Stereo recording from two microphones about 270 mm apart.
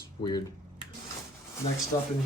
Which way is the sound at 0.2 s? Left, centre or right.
Centre.